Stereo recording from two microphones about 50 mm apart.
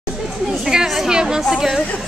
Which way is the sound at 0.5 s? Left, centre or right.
Centre.